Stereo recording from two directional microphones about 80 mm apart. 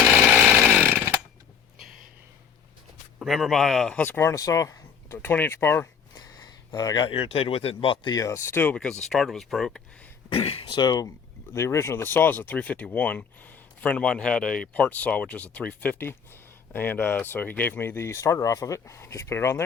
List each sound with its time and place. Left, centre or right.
0.7 s chainsaw: right
3.2 s speech: centre
3.9 s speech: left
4.3 s speech: left
6.1 s speech: left
8.1 s speech: left
8.7 s speech: centre
10.2 s speech: left
11.5 s speech: left